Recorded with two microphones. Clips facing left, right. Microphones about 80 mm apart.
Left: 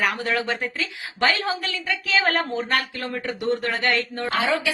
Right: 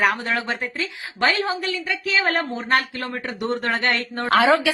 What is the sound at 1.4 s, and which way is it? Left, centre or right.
Speech, right.